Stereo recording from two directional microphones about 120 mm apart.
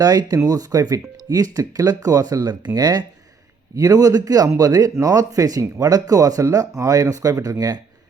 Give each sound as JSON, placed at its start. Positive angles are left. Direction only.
{"t": 0.0, "sound": "speech", "side_deg": -35}